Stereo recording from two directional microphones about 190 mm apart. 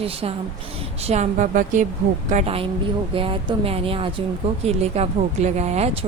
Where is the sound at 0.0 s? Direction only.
30° right (ahead or behind).